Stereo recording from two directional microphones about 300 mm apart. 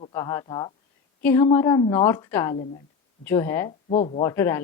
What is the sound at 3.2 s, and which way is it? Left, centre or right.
Speech, centre.